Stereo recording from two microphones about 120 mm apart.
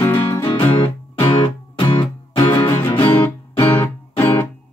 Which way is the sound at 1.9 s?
45° left (ahead or behind).